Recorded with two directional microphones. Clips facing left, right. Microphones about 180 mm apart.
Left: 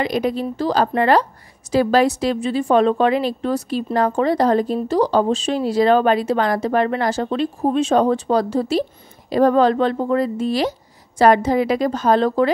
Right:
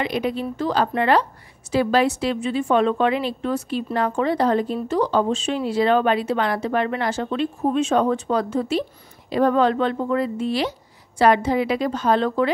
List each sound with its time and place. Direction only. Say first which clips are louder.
0.0 s speech: left 3 dB; 40° left (ahead or behind)